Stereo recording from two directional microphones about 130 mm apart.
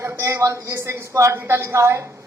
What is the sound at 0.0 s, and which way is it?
Speech, 20° right (ahead or behind).